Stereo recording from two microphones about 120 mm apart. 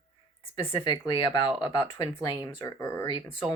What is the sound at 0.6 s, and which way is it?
Speech, 40° left (ahead or behind).